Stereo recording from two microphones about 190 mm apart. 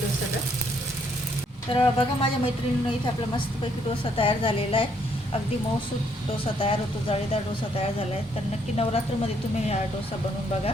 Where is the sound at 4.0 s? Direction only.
25° left (ahead or behind).